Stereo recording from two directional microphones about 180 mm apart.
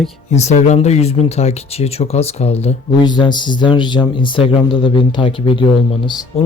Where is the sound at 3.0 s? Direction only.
25° left (ahead or behind).